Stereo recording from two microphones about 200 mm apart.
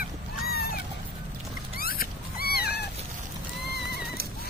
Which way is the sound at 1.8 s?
50° left (ahead or behind).